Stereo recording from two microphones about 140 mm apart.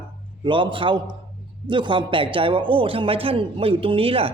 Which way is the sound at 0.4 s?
35° right (ahead or behind).